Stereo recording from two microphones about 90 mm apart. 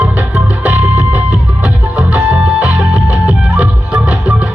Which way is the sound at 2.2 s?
15° right (ahead or behind).